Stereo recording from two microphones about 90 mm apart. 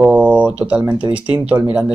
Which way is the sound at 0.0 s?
15° right (ahead or behind).